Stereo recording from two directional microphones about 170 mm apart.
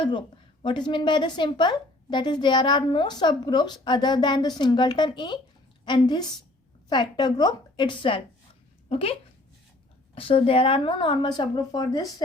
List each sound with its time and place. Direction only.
0.0 s a woman's voice: 30° left (ahead or behind)
10.2 s a woman's voice: 35° left (ahead or behind)